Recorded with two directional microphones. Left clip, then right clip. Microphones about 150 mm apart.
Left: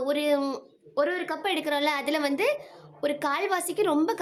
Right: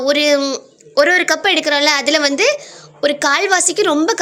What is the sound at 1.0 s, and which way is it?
Speech, 25° right (ahead or behind).